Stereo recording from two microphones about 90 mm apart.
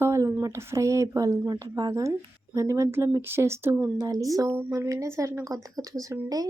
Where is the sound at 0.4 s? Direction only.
30° right (ahead or behind).